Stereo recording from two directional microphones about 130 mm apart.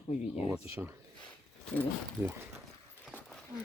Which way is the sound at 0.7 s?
20° right (ahead or behind).